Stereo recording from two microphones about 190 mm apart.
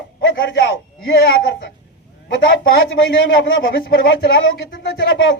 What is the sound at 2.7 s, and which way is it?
Speech, 70° left (ahead or behind).